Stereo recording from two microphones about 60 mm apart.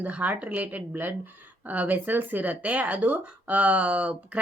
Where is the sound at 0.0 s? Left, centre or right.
Right.